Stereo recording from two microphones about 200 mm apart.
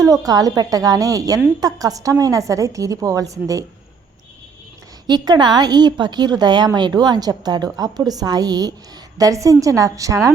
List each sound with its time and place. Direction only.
0.0 s a woman's voice: 15° right (ahead or behind)
5.0 s a woman's voice: 20° right (ahead or behind)